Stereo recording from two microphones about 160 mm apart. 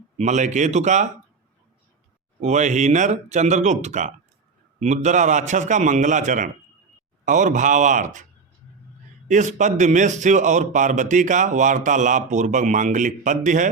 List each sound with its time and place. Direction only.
0.2 s a man's voice: 50° right (ahead or behind)
2.4 s a man's voice: 50° right (ahead or behind)